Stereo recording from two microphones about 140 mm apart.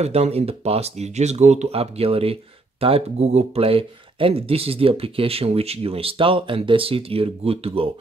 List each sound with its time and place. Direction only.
0.0 s speech: 45° right (ahead or behind)